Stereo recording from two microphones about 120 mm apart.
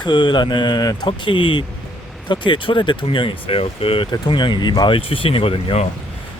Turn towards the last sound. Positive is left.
turn(degrees=55)  # may be behind; listen again after turning